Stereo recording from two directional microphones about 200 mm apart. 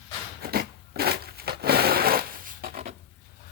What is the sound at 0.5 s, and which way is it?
Crushing, 50° right (ahead or behind).